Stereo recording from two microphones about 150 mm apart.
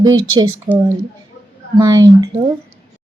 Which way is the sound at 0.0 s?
25° right (ahead or behind).